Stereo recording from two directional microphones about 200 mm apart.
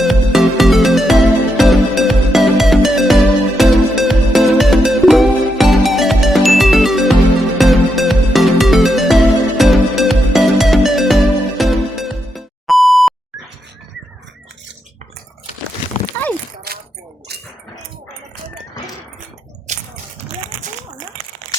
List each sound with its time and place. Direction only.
0.0 s music: centre (ahead or behind)
16.1 s horse: 10° left (ahead or behind)
19.7 s a sound: 35° right (ahead or behind)